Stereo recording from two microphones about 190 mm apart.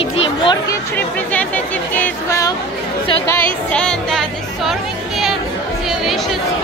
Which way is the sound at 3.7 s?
5° left (ahead or behind).